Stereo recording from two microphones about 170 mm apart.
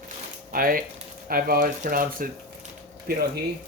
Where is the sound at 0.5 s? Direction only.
55° right (ahead or behind).